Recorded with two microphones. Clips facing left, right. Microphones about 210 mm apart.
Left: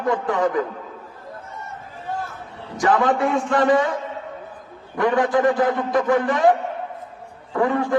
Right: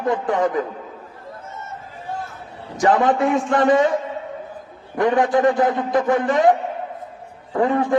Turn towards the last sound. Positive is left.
turn(degrees=-20)  # may be behind; listen again after turning